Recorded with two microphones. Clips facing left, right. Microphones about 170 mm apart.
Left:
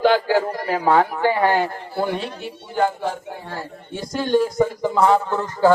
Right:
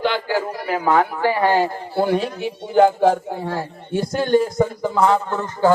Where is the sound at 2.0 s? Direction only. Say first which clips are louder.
Right 8 dB; 45° right (ahead or behind).